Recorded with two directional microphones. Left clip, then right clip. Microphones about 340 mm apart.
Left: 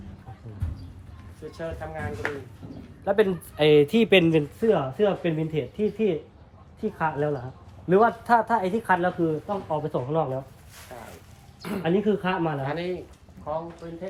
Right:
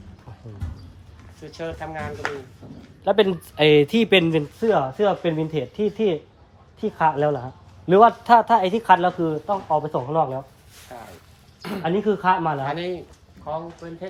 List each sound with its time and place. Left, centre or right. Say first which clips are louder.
1.5 s speech: right 4 dB; centre
10.9 s a sound: right 3 dB; right
11.8 s speech: right 2 dB; centre
12.6 s speech: right 3 dB; right